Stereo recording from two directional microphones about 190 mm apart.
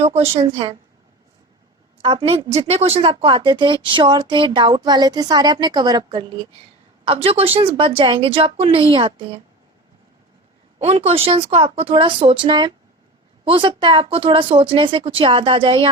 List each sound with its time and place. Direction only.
0.0 s speech: 35° right (ahead or behind)
2.0 s speech: 30° right (ahead or behind)
10.8 s speech: 35° right (ahead or behind)